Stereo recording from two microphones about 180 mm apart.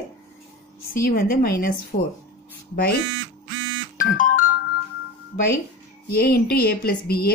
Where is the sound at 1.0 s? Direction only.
55° left (ahead or behind).